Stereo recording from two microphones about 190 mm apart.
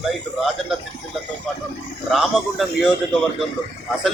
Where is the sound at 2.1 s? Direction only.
Centre (ahead or behind).